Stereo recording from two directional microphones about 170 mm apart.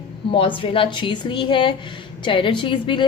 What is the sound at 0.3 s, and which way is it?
A woman's voice, 30° left (ahead or behind).